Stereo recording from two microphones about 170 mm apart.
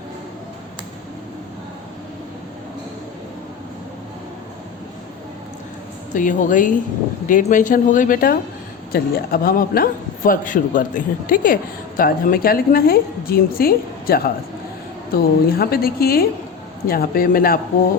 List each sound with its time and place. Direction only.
6.1 s a man's voice: 50° left (ahead or behind)